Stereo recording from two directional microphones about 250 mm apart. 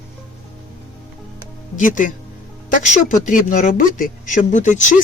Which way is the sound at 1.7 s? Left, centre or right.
Left.